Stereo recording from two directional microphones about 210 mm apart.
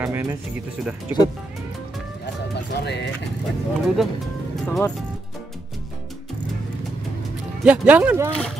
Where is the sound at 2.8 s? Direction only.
55° left (ahead or behind).